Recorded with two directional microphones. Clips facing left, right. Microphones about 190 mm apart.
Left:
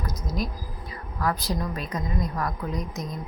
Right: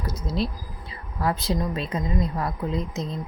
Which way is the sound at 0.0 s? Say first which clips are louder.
Right 3 dB; 30° right (ahead or behind).